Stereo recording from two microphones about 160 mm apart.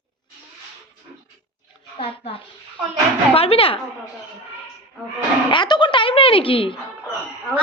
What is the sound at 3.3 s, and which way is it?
Speech, 35° left (ahead or behind).